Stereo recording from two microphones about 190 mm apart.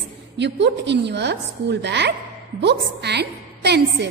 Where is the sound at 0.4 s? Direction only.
65° right (ahead or behind).